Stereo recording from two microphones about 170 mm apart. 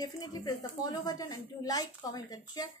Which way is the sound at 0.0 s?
25° left (ahead or behind).